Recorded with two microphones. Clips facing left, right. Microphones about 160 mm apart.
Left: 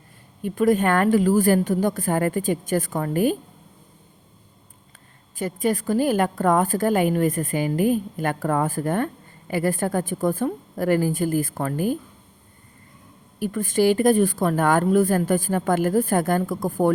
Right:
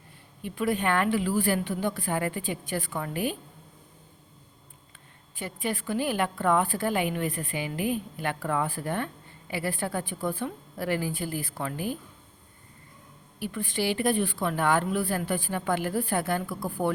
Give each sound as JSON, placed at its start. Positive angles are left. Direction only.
{"t": 0.4, "sound": "a woman's voice", "side_deg": 45}
{"t": 5.4, "sound": "a woman's voice", "side_deg": 40}
{"t": 13.4, "sound": "a woman's voice", "side_deg": 45}